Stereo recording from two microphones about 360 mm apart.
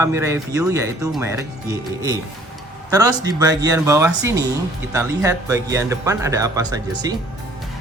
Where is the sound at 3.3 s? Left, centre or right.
Centre.